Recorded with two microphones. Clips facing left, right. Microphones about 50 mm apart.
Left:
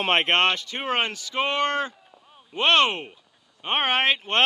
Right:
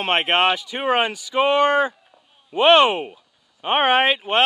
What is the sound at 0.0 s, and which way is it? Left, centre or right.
Speech, centre.